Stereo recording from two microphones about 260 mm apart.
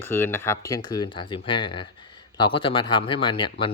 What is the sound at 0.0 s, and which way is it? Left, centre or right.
Speech, centre.